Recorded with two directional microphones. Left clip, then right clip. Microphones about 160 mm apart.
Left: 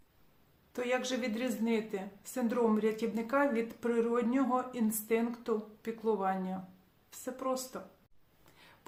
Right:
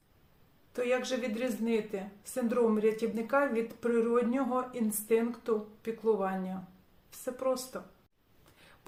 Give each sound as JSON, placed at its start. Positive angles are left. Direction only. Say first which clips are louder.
{"t": 0.7, "sound": "a woman's voice", "louder": "right 3 dB", "side_deg": 10}